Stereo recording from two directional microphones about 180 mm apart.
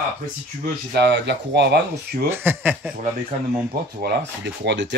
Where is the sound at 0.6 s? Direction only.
70° right (ahead or behind).